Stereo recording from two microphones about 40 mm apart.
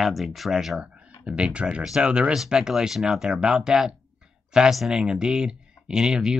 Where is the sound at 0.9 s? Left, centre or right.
Right.